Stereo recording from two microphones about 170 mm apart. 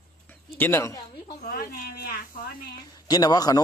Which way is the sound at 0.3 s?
15° left (ahead or behind).